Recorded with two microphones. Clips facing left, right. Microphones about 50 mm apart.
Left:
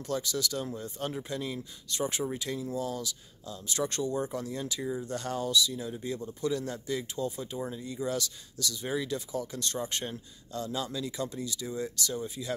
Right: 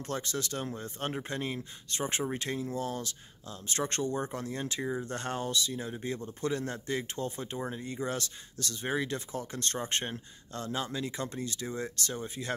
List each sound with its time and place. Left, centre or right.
0.0 s speech: right